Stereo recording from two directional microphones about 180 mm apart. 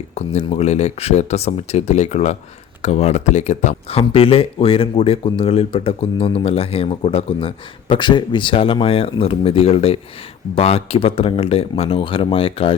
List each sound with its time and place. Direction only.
0.2 s speech: 35° left (ahead or behind)